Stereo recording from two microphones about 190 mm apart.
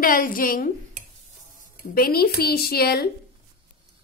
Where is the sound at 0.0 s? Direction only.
45° left (ahead or behind).